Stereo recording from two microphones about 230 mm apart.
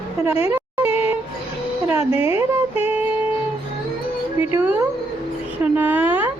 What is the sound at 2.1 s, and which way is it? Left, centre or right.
Speech, left.